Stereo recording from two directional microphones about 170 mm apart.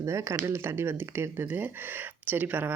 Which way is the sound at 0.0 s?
15° right (ahead or behind).